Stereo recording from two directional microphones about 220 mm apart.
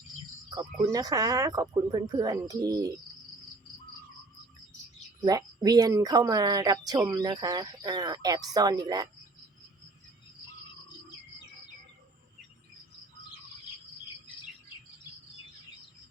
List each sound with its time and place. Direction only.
0.5 s speech: 15° right (ahead or behind)
5.2 s speech: 15° right (ahead or behind)